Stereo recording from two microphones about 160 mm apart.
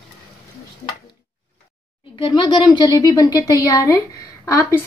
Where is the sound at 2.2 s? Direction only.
30° left (ahead or behind).